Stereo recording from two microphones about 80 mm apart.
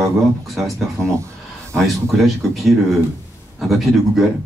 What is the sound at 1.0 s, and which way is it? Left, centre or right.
Speech, right.